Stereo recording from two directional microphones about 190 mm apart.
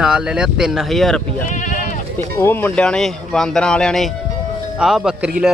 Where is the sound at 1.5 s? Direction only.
40° left (ahead or behind).